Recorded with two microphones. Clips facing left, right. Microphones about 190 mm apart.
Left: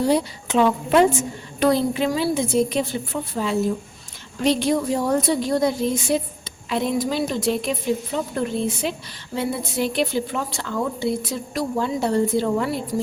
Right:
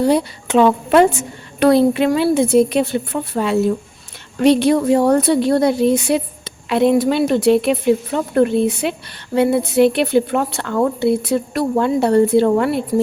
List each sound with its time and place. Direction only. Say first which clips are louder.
0.0 s a woman's voice: right 4 dB; 60° right (ahead or behind)